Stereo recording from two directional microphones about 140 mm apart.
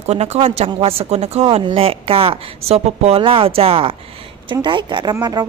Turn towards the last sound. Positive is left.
turn(degrees=-30)  # may be behind; listen again after turning